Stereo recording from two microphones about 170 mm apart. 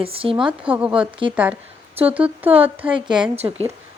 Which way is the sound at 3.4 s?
25° right (ahead or behind).